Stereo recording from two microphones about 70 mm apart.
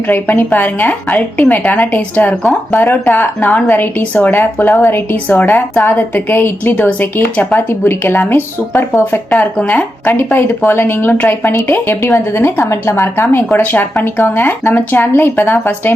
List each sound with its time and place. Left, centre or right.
0.1 s a woman's voice: left
7.7 s speech: left
9.3 s a woman's voice: left